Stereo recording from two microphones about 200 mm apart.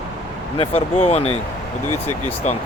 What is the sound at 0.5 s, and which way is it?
Speech, 30° left (ahead or behind).